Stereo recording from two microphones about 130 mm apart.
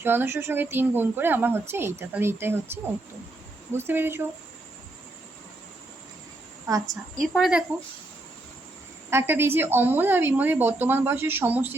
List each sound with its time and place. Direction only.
0.0 s a woman's voice: 15° right (ahead or behind)
3.7 s a woman's voice: 15° right (ahead or behind)
6.7 s a woman's voice: 30° right (ahead or behind)
6.9 s a woman's voice: centre (ahead or behind)
9.0 s a woman's voice: 20° right (ahead or behind)